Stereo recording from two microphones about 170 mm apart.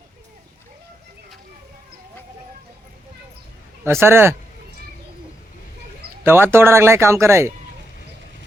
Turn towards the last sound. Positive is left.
turn(degrees=-15)  # may be behind; listen again after turning